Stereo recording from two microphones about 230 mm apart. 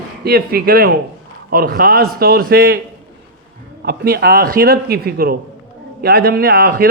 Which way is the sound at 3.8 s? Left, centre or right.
Right.